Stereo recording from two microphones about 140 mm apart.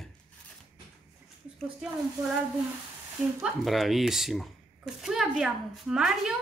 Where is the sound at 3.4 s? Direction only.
Centre (ahead or behind).